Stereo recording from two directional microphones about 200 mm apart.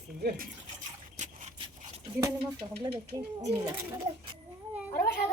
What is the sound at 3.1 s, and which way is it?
Speech, 25° right (ahead or behind).